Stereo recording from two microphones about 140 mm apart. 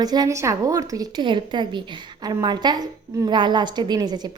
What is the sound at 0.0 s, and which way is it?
A woman's voice, 30° right (ahead or behind).